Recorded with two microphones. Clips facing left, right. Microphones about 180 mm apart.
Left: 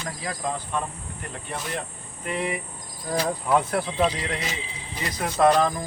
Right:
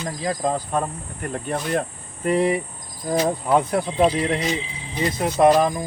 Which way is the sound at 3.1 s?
25° right (ahead or behind).